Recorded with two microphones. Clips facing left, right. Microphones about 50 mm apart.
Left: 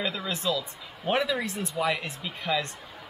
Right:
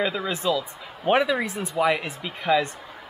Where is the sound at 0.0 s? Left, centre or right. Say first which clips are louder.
Right 5 dB; centre.